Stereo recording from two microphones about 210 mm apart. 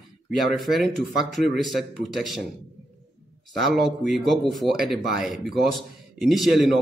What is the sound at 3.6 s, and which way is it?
A man's voice, centre (ahead or behind).